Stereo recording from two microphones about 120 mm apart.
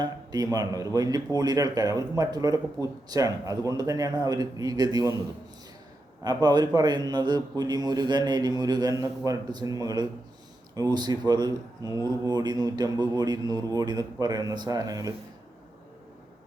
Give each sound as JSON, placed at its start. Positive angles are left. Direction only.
{"t": 0.0, "sound": "speech", "side_deg": -35}
{"t": 6.2, "sound": "speech", "side_deg": -35}